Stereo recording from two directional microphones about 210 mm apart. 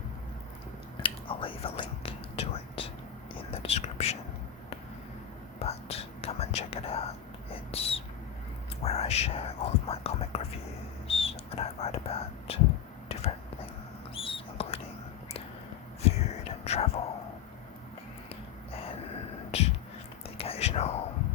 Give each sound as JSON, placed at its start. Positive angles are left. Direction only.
{"t": 1.0, "sound": "whispering", "side_deg": 25}
{"t": 5.5, "sound": "whispering", "side_deg": 30}
{"t": 14.2, "sound": "mouse", "side_deg": 25}
{"t": 16.0, "sound": "whispering", "side_deg": 30}
{"t": 18.7, "sound": "a sound", "side_deg": 25}
{"t": 19.5, "sound": "music", "side_deg": 30}
{"t": 20.2, "sound": "whispering", "side_deg": 30}